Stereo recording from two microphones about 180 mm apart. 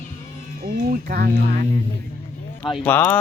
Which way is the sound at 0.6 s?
55° right (ahead or behind).